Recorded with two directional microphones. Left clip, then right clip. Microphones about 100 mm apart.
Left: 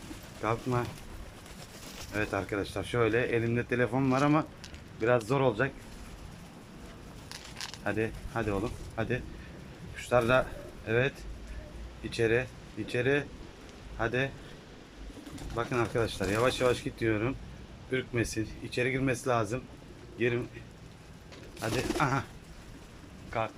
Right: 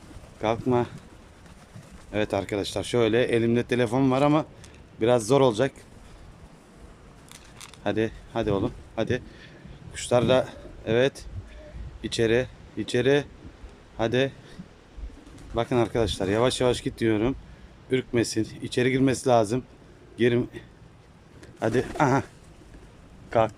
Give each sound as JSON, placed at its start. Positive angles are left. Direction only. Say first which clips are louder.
{"t": 0.4, "sound": "speech", "louder": "right 7 dB", "side_deg": -50}
{"t": 2.1, "sound": "speech", "louder": "right 6 dB", "side_deg": -55}
{"t": 7.9, "sound": "speech", "louder": "right 6 dB", "side_deg": -65}
{"t": 9.9, "sound": "speech", "louder": "right 4 dB", "side_deg": -80}
{"t": 15.5, "sound": "speech", "louder": "right 6 dB", "side_deg": -60}
{"t": 20.1, "sound": "speech", "louder": "right 7 dB", "side_deg": -85}